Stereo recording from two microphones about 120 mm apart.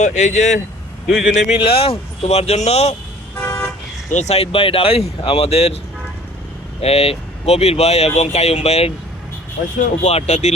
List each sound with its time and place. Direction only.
0.0 s a man's voice: 75° left (ahead or behind)
1.6 s speech: 50° left (ahead or behind)
3.4 s car: 20° left (ahead or behind)
4.1 s speech: 70° left (ahead or behind)
6.8 s speech: 55° left (ahead or behind)
10.0 s speech: 65° left (ahead or behind)